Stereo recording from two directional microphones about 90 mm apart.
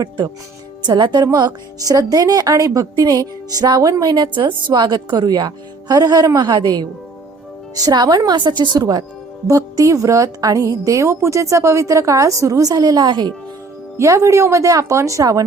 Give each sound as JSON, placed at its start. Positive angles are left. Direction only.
{"t": 0.9, "sound": "speech", "side_deg": -60}
{"t": 1.2, "sound": "a woman's voice", "side_deg": -45}
{"t": 4.1, "sound": "a woman's voice", "side_deg": -60}
{"t": 7.9, "sound": "a woman's voice", "side_deg": -45}
{"t": 9.5, "sound": "a woman's voice", "side_deg": -35}
{"t": 13.9, "sound": "a woman's voice", "side_deg": -30}